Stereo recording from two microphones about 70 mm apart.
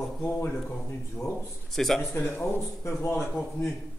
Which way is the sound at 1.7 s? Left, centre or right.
Centre.